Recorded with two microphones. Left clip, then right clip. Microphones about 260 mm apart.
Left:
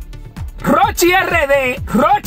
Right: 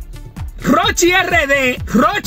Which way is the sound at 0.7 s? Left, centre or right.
Left.